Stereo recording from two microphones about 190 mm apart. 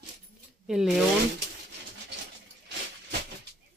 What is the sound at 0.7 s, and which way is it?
Speech, centre (ahead or behind).